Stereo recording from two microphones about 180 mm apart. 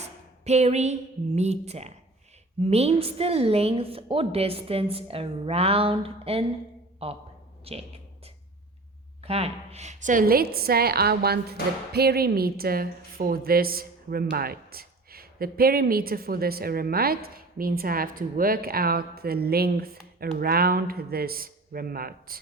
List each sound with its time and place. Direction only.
0.0 s a sound: 40° right (ahead or behind)
1.4 s a woman's voice: 35° right (ahead or behind)
9.2 s a woman's voice: 35° right (ahead or behind); by 22.4 s 55° right (ahead or behind)